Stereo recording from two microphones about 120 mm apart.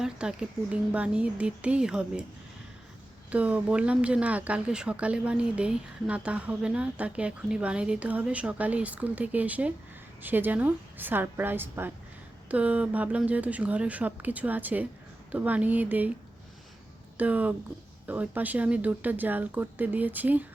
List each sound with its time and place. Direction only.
0.0 s speech: 5° right (ahead or behind)
3.2 s speech: 10° right (ahead or behind)
17.2 s speech: 15° right (ahead or behind)